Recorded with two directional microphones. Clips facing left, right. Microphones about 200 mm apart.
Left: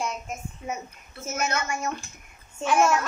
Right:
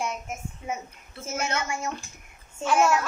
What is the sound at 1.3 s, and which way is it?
Speech, 30° right (ahead or behind).